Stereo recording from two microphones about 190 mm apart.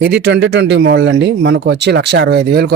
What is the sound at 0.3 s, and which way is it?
Speech, 60° right (ahead or behind).